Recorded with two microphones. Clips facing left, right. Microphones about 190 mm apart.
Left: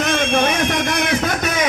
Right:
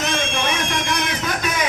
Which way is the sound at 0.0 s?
50° left (ahead or behind).